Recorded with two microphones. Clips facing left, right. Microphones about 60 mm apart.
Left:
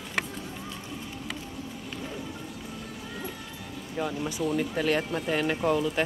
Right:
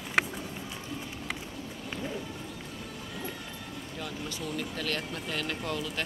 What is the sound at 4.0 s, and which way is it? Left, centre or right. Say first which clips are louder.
Speech: left 9 dB; centre.